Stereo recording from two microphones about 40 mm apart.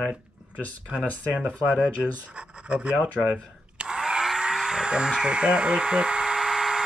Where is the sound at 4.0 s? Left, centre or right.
Centre.